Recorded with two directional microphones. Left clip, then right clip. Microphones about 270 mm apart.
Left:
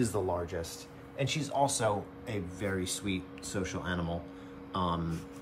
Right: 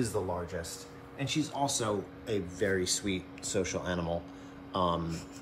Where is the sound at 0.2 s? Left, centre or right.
Left.